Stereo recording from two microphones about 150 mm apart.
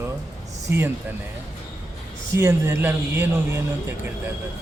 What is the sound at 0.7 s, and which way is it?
Speech, 15° right (ahead or behind).